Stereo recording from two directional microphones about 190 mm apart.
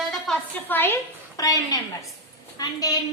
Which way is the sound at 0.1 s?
5° left (ahead or behind).